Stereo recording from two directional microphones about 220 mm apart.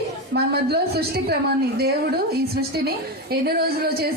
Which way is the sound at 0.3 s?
45° right (ahead or behind).